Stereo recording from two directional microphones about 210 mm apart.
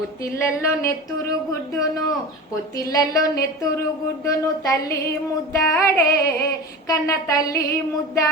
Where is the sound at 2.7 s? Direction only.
15° left (ahead or behind).